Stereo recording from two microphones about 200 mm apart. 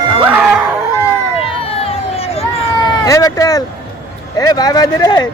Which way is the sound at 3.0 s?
15° left (ahead or behind).